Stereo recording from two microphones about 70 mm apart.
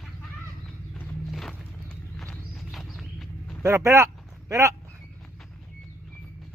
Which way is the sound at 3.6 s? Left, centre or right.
Right.